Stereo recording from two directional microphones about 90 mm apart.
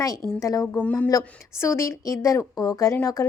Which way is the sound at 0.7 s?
15° left (ahead or behind).